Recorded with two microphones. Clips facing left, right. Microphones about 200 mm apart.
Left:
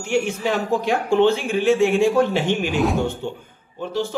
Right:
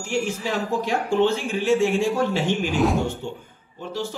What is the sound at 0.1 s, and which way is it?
Speech, 65° left (ahead or behind).